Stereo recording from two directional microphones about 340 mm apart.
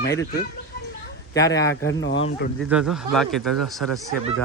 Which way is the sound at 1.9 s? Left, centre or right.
Left.